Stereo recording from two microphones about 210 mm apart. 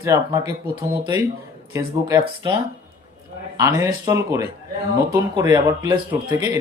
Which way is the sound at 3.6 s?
15° right (ahead or behind).